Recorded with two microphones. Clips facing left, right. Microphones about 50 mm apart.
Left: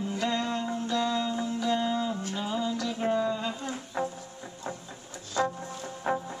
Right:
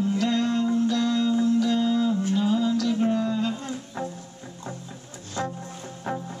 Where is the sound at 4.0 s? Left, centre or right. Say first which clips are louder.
Left 2 dB; centre.